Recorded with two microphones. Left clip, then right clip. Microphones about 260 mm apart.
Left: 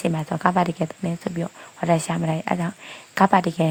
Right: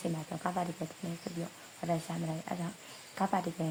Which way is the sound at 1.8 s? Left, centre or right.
Left.